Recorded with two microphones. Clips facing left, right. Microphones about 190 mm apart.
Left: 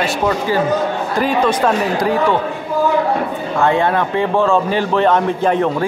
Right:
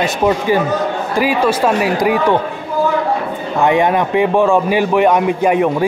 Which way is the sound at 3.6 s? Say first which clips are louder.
Right 2 dB; 15° right (ahead or behind).